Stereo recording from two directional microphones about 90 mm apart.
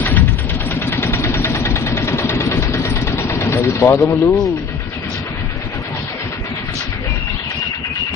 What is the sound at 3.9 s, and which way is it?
Speech, 25° left (ahead or behind).